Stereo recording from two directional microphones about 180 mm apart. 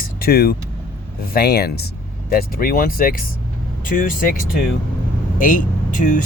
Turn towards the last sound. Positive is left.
turn(degrees=45)  # may be behind; listen again after turning